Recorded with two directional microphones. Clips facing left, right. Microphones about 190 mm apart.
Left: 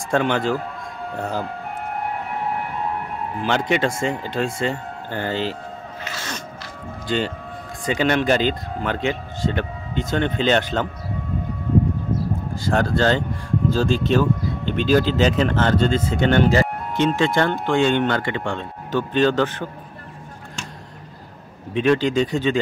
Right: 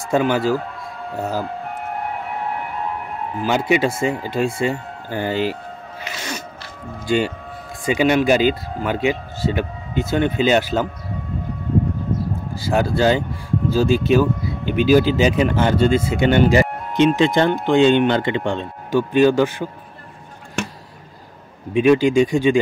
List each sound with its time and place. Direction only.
0.1 s speech: 5° right (ahead or behind)
3.4 s speech: 10° right (ahead or behind)
6.0 s a sound: 10° right (ahead or behind)
7.1 s speech: 10° right (ahead or behind)
12.5 s speech: 10° right (ahead or behind)
20.6 s a sound: 65° right (ahead or behind)
21.7 s speech: 10° right (ahead or behind)